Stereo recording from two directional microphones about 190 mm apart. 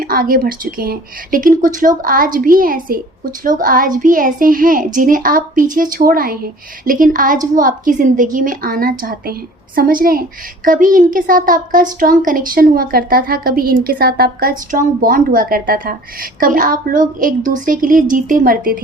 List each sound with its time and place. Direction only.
0.0 s a woman's voice: 50° right (ahead or behind)